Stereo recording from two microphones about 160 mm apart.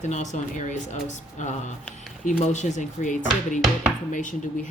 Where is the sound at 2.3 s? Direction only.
50° left (ahead or behind).